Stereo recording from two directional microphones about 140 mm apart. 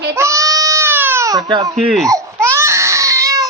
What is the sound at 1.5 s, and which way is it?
Speech, 30° right (ahead or behind).